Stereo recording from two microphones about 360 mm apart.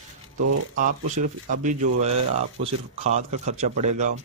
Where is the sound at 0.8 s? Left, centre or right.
Right.